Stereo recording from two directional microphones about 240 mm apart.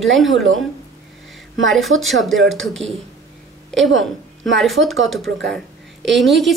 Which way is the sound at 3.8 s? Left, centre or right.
Right.